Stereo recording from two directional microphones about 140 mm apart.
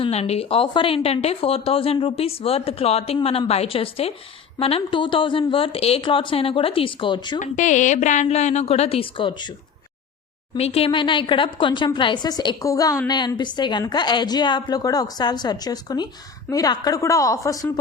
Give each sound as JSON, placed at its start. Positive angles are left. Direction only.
{"t": 0.0, "sound": "a woman's voice", "side_deg": 50}
{"t": 7.3, "sound": "speech", "side_deg": 60}
{"t": 10.6, "sound": "a woman's voice", "side_deg": 45}